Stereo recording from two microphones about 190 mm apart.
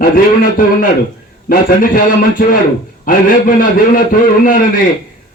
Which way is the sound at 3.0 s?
50° left (ahead or behind).